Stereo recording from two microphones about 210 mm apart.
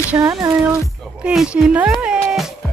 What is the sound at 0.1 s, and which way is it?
Music, 15° right (ahead or behind).